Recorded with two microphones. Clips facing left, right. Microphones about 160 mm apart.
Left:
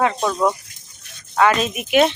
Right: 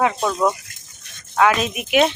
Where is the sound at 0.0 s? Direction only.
5° right (ahead or behind).